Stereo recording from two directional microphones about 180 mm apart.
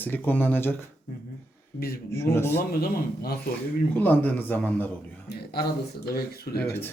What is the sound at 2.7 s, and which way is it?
Speech, 55° left (ahead or behind).